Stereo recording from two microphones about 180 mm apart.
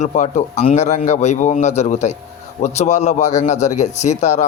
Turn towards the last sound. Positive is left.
turn(degrees=40)  # may be behind; listen again after turning